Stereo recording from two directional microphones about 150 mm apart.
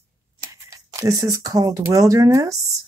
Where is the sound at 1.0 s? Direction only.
25° right (ahead or behind).